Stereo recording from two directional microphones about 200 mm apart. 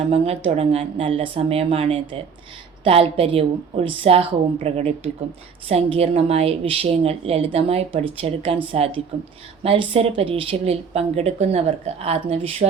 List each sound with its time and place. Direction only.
0.1 s a woman's voice: 30° right (ahead or behind)